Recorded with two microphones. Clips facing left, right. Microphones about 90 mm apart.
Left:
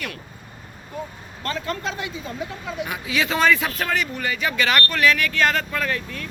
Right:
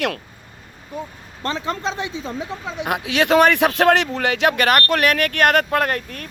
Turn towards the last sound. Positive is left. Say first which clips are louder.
# right 5 dB
turn(degrees=-55)  # may be behind; listen again after turning